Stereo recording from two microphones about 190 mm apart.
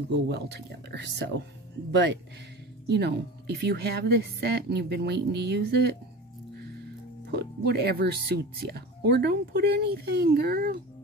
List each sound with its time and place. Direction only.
0.1 s speech: 65° right (ahead or behind)
2.9 s speech: 60° right (ahead or behind)
7.2 s speech: 60° right (ahead or behind)